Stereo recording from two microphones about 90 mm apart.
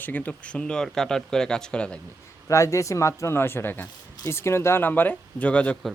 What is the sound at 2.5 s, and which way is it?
A man's voice, 35° left (ahead or behind).